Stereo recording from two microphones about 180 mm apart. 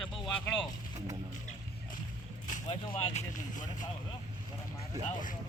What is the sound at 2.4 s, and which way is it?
Speech, 40° left (ahead or behind).